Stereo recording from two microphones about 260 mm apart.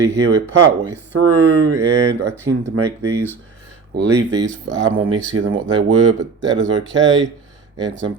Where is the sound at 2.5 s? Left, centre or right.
Right.